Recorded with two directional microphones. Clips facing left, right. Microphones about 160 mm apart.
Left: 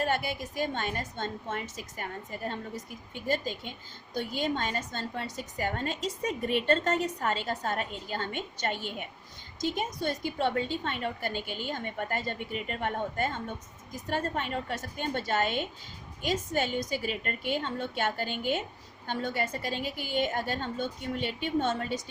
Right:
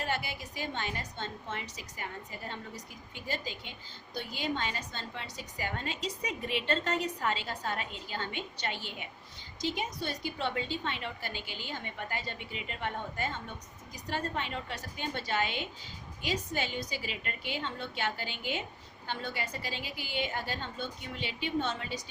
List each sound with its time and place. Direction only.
0.0 s a woman's voice: 50° left (ahead or behind)